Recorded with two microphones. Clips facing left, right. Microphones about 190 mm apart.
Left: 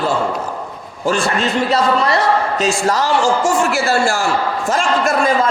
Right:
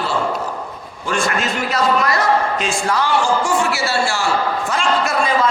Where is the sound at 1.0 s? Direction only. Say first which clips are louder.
Left 3 dB; 30° left (ahead or behind); by 4.3 s 50° left (ahead or behind).